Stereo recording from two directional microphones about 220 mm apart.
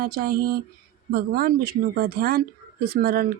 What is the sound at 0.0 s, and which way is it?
Speech, 40° right (ahead or behind).